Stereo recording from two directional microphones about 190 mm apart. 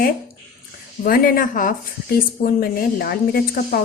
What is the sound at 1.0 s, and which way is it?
Speech, 50° left (ahead or behind).